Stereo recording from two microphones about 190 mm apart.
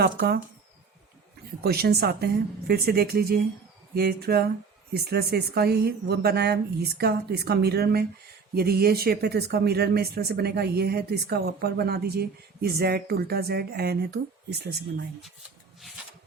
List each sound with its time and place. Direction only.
0.0 s speech: 55° right (ahead or behind)
1.6 s speech: 55° right (ahead or behind)